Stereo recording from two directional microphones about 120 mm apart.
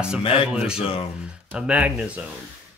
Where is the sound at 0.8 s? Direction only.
50° left (ahead or behind).